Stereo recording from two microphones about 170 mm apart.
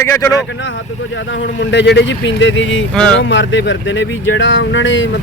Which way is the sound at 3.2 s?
90° left.